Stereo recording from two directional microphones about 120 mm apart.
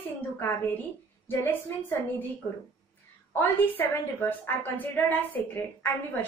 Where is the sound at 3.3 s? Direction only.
15° left (ahead or behind).